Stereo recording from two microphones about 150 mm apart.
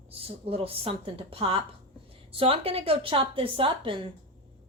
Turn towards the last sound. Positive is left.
turn(degrees=-35)  # may be behind; listen again after turning